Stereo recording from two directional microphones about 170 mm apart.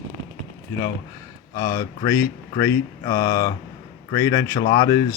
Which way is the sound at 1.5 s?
20° left (ahead or behind).